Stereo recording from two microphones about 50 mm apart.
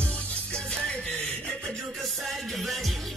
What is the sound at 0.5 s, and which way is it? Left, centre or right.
Music, centre.